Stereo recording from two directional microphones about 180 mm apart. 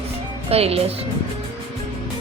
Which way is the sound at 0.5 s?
35° right (ahead or behind).